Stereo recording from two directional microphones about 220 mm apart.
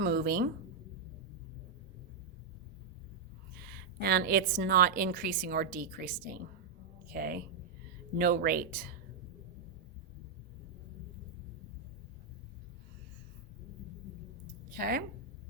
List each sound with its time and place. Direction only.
0.0 s a woman's voice: 45° right (ahead or behind)
3.7 s a woman's voice: 45° right (ahead or behind)
14.4 s a sound: 40° right (ahead or behind)